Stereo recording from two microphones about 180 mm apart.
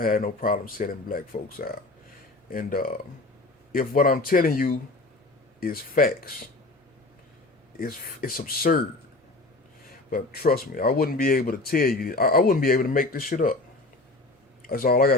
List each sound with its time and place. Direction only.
0.0 s speech: 50° left (ahead or behind)
7.8 s speech: 55° left (ahead or behind)
10.1 s speech: 55° left (ahead or behind)
14.7 s speech: 55° left (ahead or behind)